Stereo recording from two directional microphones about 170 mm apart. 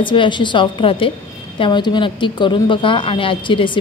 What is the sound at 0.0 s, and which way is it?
A woman's voice, 30° left (ahead or behind).